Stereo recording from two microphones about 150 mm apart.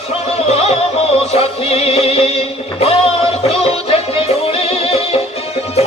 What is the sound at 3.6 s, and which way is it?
Music, 40° left (ahead or behind).